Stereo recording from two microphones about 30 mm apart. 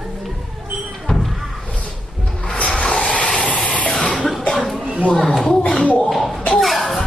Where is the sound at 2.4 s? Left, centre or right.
Left.